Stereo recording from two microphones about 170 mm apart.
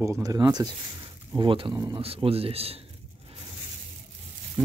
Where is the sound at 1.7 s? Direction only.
20° right (ahead or behind).